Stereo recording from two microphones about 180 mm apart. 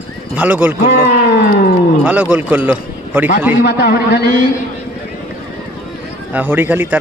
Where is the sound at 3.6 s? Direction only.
60° left (ahead or behind).